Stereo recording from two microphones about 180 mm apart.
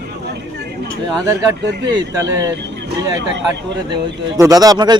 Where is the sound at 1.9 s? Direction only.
25° right (ahead or behind).